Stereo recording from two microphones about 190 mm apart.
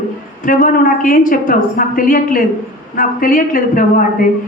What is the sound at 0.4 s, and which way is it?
A woman's voice, 45° left (ahead or behind).